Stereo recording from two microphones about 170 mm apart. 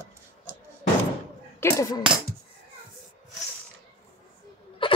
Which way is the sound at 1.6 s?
20° left (ahead or behind).